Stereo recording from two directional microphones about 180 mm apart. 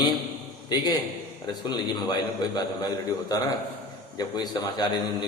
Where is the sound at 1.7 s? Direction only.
25° left (ahead or behind).